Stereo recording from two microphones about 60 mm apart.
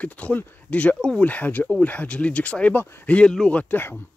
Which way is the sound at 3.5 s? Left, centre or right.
Left.